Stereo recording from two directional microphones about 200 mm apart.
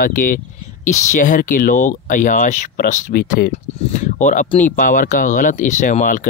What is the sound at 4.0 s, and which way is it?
Speech, 35° left (ahead or behind).